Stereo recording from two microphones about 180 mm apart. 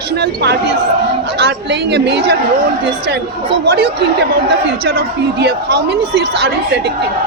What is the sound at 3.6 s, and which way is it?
A woman's voice, 65° right (ahead or behind).